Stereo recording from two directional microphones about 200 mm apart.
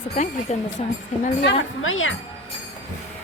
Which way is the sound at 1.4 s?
70° left (ahead or behind).